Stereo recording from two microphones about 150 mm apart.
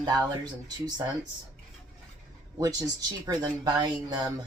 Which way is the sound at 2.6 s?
25° right (ahead or behind).